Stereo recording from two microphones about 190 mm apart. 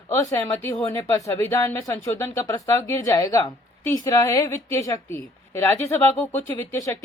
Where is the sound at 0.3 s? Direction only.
15° left (ahead or behind).